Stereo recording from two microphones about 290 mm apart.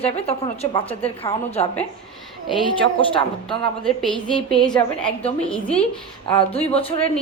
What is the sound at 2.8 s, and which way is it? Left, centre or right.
Speech, centre.